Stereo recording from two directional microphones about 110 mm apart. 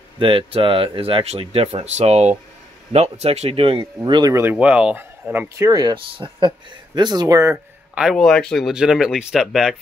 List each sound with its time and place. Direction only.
0.2 s speech: 55° right (ahead or behind); by 2.3 s 85° right
2.9 s speech: 75° right (ahead or behind)
4.0 s speech: 40° right (ahead or behind)
4.3 s speech: 25° right (ahead or behind)
4.6 s speech: 10° right (ahead or behind)
5.6 s speech: 35° right (ahead or behind)
7.0 s speech: 40° right (ahead or behind)
7.9 s speech: 5° right (ahead or behind)